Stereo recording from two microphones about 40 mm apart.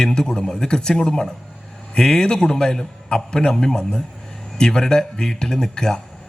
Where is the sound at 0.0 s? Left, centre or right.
Centre.